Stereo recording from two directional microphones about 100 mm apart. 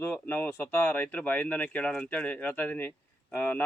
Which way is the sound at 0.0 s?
20° left (ahead or behind).